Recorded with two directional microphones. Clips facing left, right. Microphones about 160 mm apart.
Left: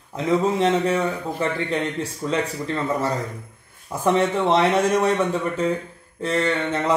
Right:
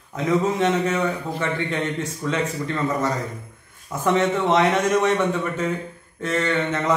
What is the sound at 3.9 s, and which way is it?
A man's voice, 30° left (ahead or behind).